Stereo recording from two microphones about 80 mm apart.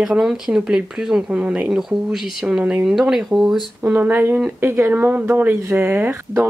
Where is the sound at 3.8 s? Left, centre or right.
Right.